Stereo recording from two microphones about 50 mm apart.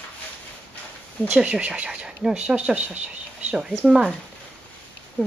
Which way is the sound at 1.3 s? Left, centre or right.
Right.